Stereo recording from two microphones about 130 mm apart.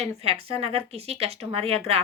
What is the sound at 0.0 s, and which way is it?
Speech, 50° right (ahead or behind).